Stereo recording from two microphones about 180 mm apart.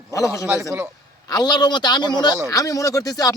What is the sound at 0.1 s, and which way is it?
A man's voice, 15° left (ahead or behind).